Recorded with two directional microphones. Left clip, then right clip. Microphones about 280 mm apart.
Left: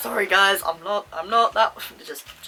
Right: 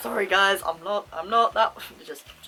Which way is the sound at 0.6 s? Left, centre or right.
Centre.